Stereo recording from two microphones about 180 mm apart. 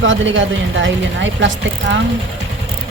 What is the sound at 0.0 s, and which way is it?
A woman's voice, 90° right.